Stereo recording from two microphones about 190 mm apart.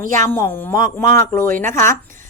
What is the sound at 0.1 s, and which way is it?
A woman's voice, 15° left (ahead or behind).